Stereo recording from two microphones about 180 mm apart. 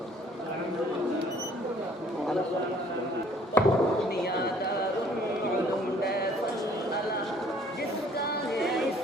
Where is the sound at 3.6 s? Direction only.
10° left (ahead or behind).